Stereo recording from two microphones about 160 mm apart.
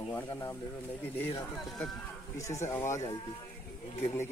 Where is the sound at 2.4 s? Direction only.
20° left (ahead or behind).